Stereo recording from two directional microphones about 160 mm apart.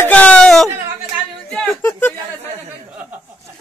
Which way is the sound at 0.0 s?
10° left (ahead or behind).